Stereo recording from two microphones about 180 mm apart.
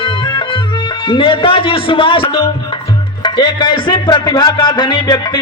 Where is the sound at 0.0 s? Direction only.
30° left (ahead or behind).